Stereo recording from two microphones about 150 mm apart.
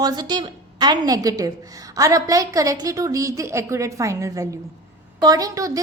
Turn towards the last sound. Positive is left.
turn(degrees=-25)  # may be behind; listen again after turning